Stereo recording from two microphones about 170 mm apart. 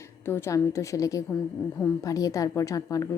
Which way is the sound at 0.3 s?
15° left (ahead or behind).